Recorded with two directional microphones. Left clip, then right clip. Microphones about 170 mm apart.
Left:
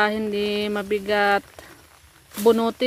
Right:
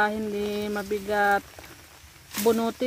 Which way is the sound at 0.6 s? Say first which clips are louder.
Left 5 dB; 25° left (ahead or behind).